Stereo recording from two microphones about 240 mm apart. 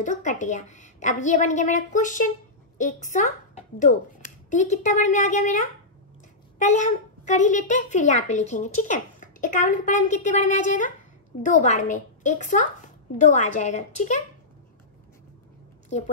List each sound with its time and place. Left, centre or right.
0.0 s a child's voice: left